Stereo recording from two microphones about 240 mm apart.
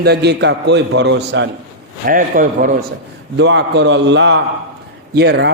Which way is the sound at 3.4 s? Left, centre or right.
Right.